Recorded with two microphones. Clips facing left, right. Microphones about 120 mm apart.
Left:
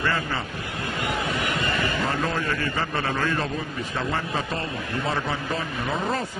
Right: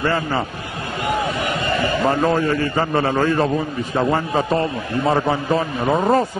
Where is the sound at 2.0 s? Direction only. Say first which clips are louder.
Right 9 dB; 35° right (ahead or behind).